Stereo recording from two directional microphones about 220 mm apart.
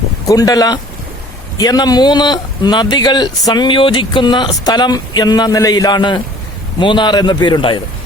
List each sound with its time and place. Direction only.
0.3 s speech: 15° left (ahead or behind)